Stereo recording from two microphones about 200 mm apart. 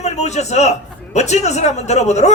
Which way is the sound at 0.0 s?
35° left (ahead or behind).